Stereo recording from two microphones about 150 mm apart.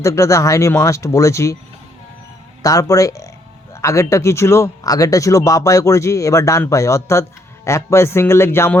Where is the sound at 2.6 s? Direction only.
20° left (ahead or behind).